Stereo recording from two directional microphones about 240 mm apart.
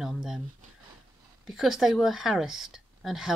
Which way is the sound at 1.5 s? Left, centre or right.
Centre.